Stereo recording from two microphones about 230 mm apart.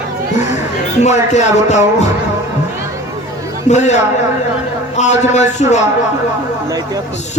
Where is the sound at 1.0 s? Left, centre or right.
Left.